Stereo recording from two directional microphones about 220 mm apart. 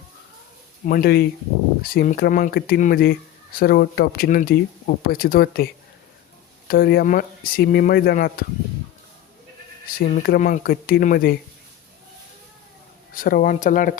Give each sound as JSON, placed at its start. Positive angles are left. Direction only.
{"t": 0.9, "sound": "speech", "side_deg": 40}
{"t": 6.7, "sound": "speech", "side_deg": 45}
{"t": 10.0, "sound": "speech", "side_deg": 40}
{"t": 13.1, "sound": "speech", "side_deg": 40}